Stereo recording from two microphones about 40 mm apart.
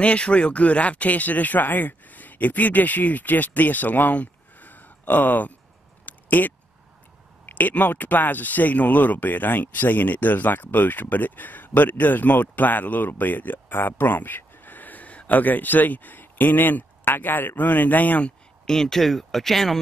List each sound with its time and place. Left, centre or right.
0.0 s speech: left
6.0 s a sound: left
7.4 s speech: left
18.7 s speech: centre